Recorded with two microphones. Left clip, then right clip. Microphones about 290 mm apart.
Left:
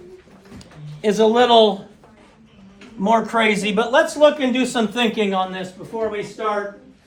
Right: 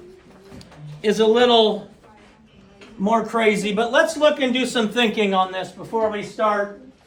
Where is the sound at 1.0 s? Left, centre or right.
Centre.